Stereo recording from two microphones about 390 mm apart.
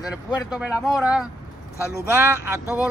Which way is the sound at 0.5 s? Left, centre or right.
Centre.